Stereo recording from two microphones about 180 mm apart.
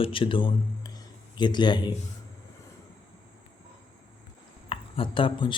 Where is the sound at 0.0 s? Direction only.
30° left (ahead or behind).